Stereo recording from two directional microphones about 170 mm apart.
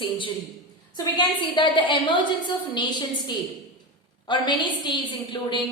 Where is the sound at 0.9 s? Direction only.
25° left (ahead or behind).